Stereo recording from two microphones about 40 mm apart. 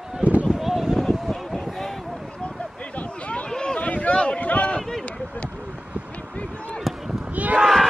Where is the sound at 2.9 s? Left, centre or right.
Left.